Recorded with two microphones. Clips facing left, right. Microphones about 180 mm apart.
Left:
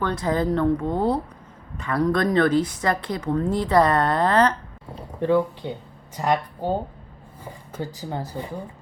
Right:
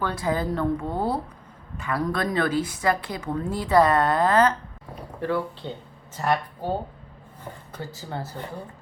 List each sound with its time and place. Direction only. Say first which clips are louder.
0.0 s a woman's voice: left 3 dB; 5° right (ahead or behind)
4.9 s speech: left 6 dB; 20° left (ahead or behind)